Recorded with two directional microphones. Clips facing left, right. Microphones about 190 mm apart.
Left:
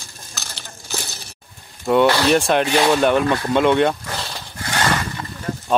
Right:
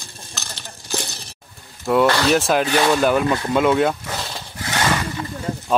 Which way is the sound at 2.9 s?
5° right (ahead or behind).